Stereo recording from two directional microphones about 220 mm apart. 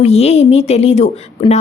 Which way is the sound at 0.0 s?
30° left (ahead or behind).